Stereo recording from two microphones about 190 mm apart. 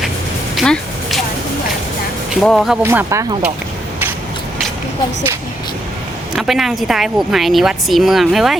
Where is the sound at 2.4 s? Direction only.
Centre (ahead or behind).